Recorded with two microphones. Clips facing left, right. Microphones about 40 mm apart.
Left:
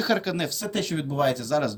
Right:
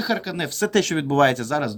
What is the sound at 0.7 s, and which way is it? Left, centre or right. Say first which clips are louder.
Speech: right 11 dB; right.